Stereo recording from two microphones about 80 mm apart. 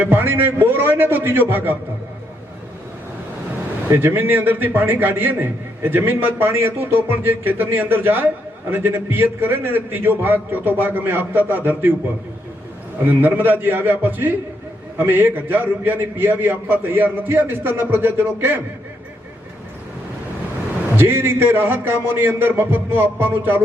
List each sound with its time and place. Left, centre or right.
0.0 s a man's voice: right
3.8 s a man's voice: right
13.1 s a man's voice: right
20.9 s a man's voice: right